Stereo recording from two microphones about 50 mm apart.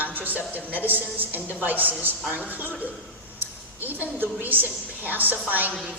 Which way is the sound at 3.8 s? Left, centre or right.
Right.